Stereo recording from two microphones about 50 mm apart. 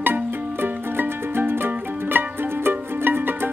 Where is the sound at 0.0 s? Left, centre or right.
Right.